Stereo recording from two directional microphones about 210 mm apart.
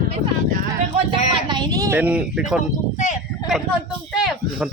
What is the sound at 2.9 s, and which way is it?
Speech, 35° left (ahead or behind).